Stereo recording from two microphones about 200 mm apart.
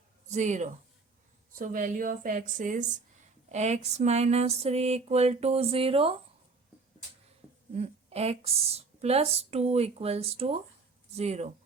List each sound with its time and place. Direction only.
0.3 s a woman's voice: 35° right (ahead or behind)
7.7 s a woman's voice: 30° right (ahead or behind)